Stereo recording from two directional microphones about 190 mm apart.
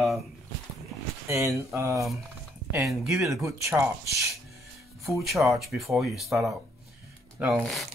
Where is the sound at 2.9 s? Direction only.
5° right (ahead or behind).